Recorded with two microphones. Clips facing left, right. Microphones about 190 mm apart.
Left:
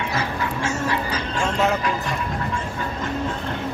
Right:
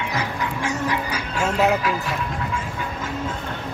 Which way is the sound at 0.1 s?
15° right (ahead or behind).